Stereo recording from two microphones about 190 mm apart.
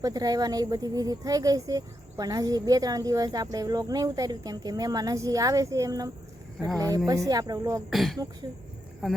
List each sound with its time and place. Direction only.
0.0 s speech: 20° right (ahead or behind)
7.9 s speech: centre (ahead or behind)